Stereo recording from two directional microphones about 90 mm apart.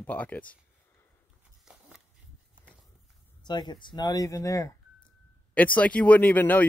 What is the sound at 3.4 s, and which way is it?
Speech, 55° left (ahead or behind).